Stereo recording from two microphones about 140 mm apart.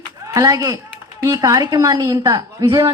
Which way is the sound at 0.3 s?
25° right (ahead or behind).